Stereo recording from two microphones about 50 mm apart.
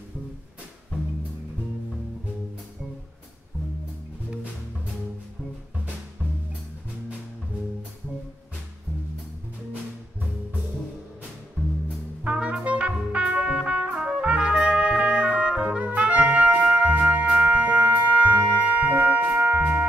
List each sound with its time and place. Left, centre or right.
12.2 s music: right
13.9 s trumpet: centre
15.8 s music: right